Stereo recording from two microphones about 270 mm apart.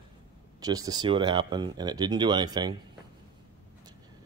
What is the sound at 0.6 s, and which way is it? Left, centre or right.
Speech, centre.